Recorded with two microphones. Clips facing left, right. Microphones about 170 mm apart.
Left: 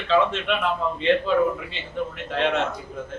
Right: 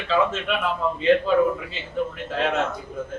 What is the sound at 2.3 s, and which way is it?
Speech, 5° right (ahead or behind).